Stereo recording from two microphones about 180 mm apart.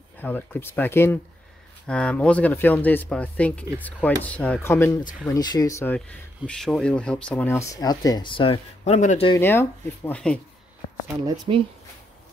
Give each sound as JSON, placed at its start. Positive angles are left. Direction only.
{"t": 0.2, "sound": "speech", "side_deg": 10}
{"t": 5.9, "sound": "speech", "side_deg": 5}
{"t": 9.4, "sound": "speech", "side_deg": 10}
{"t": 11.2, "sound": "speech", "side_deg": -30}